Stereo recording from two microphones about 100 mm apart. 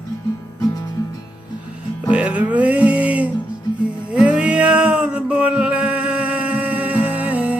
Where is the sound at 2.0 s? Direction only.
10° right (ahead or behind).